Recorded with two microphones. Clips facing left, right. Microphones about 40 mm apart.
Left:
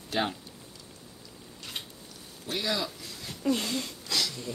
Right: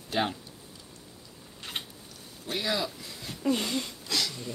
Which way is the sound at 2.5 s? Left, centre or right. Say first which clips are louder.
Right 1 dB; centre.